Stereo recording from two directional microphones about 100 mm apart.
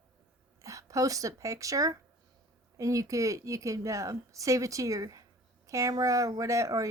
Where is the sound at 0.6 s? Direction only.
35° right (ahead or behind).